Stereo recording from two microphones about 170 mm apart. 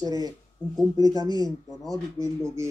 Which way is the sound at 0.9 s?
20° right (ahead or behind).